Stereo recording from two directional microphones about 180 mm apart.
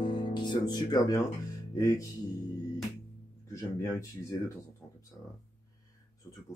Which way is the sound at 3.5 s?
15° left (ahead or behind).